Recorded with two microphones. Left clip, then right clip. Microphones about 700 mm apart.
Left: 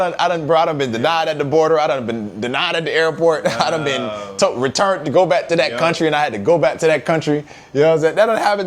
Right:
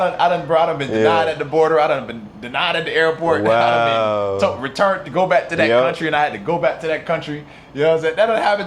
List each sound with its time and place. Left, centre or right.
0.0 s a man's voice: left
6.6 s a man's voice: left